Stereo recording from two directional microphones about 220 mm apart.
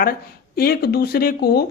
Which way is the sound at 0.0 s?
40° left (ahead or behind).